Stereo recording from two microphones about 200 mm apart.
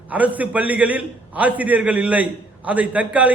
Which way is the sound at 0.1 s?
5° right (ahead or behind).